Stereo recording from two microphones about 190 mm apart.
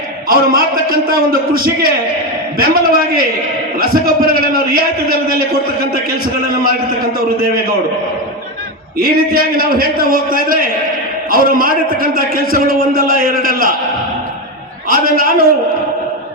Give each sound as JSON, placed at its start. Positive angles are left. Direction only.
{"t": 0.3, "sound": "a man's voice", "side_deg": -50}
{"t": 9.0, "sound": "a man's voice", "side_deg": -50}
{"t": 14.8, "sound": "a man's voice", "side_deg": -50}